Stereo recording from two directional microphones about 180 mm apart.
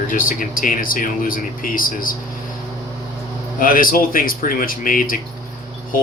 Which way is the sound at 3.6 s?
50° left (ahead or behind).